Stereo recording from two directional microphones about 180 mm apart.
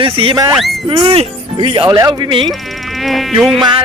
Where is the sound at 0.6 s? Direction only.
Centre (ahead or behind).